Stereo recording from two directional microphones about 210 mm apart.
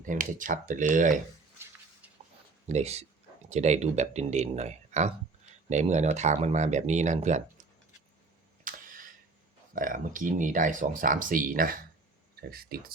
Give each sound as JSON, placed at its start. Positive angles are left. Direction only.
{"t": 0.0, "sound": "speech", "side_deg": -40}
{"t": 2.6, "sound": "speech", "side_deg": -30}
{"t": 8.6, "sound": "a sound", "side_deg": -40}
{"t": 9.7, "sound": "speech", "side_deg": -40}